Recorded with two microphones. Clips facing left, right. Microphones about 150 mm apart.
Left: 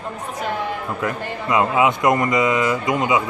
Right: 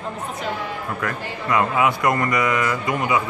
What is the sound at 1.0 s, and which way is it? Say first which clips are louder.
A man's voice: left 3 dB; 20° left (ahead or behind).